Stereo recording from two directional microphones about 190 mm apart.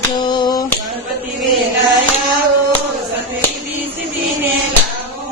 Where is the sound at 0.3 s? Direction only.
20° left (ahead or behind).